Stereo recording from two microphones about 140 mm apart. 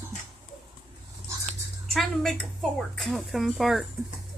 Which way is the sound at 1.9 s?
5° left (ahead or behind).